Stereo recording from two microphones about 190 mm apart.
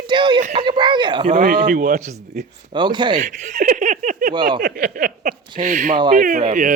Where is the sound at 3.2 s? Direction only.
40° right (ahead or behind).